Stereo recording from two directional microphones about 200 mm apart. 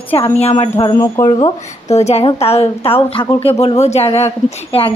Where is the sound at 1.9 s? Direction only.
30° left (ahead or behind).